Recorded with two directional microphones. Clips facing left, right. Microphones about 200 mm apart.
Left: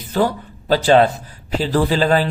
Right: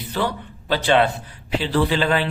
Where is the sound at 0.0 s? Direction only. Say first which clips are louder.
Left 6 dB; 45° left (ahead or behind).